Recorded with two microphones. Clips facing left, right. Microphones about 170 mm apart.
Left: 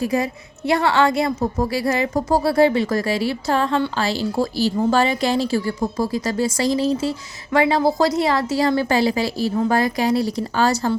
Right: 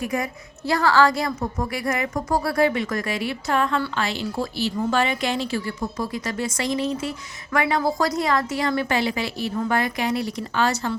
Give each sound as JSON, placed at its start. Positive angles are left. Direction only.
{"t": 0.0, "sound": "a woman's voice", "side_deg": 30}